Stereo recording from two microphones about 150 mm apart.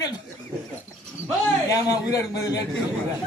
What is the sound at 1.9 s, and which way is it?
Speech, 25° left (ahead or behind).